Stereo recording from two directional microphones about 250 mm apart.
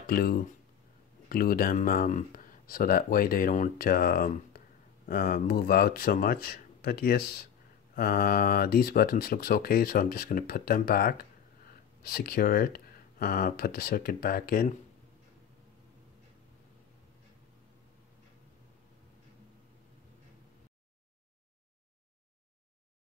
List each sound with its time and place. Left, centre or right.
0.0 s speech: left